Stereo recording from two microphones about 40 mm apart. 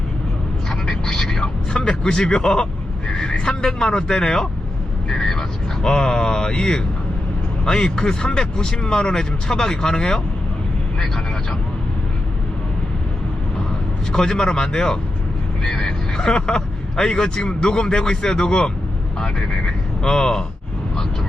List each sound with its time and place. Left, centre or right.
0.7 s vehicle: centre
1.7 s a man's voice: left
14.1 s speech: centre